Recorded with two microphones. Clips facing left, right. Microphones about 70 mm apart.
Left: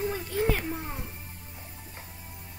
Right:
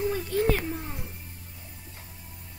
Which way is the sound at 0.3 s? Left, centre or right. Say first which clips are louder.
Right 2 dB; centre.